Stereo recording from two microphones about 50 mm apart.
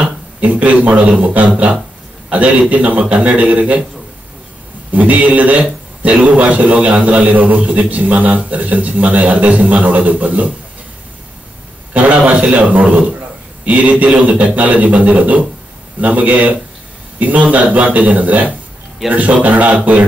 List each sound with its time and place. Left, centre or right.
0.0 s a sound: right
1.1 s a man's voice: right
4.9 s a man's voice: right
11.9 s a man's voice: right